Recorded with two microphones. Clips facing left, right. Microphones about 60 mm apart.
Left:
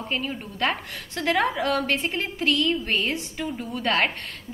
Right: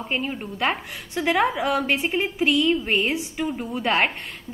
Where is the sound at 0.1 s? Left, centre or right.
Right.